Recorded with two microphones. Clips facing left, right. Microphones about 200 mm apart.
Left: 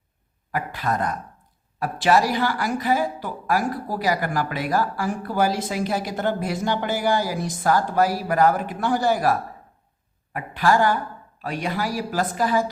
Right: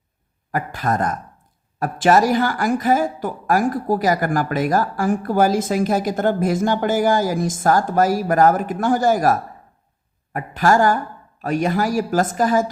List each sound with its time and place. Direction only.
0.5 s a woman's voice: 45° right (ahead or behind)